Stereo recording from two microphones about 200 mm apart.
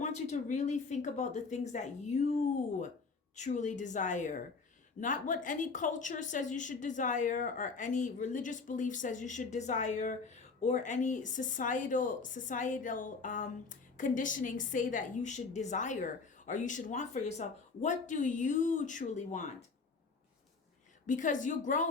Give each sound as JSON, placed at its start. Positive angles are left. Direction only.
{"t": 0.0, "sound": "a woman's voice", "side_deg": 35}
{"t": 3.3, "sound": "a woman's voice", "side_deg": 40}
{"t": 21.1, "sound": "a woman's voice", "side_deg": 40}